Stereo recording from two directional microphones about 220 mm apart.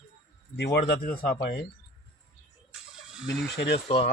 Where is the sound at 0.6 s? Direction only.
50° left (ahead or behind).